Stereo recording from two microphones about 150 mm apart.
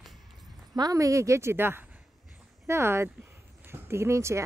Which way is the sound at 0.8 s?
25° right (ahead or behind).